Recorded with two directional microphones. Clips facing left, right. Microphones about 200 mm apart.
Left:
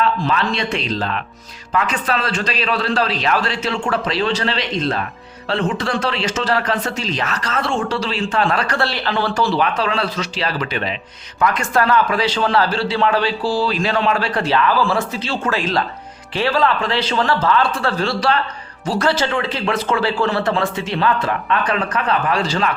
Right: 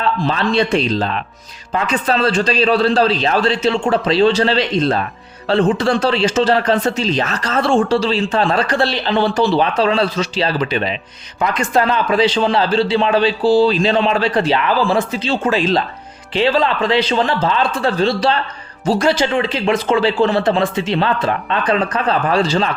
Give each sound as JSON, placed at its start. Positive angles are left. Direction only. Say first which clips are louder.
{"t": 0.2, "sound": "a man's voice", "louder": "right 4 dB", "side_deg": -30}